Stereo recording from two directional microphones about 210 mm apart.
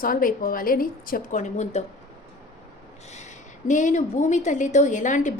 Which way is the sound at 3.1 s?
35° left (ahead or behind).